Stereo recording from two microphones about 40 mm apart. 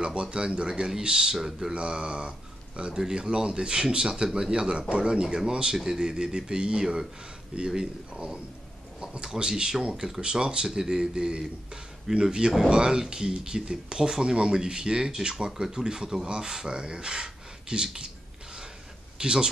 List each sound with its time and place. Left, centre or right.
0.0 s speech: right
1.7 s speech: right
2.9 s speech: centre
3.2 s speech: right
9.1 s speech: centre
19.1 s speech: right